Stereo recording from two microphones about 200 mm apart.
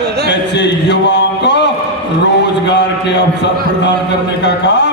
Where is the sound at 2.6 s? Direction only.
60° left (ahead or behind).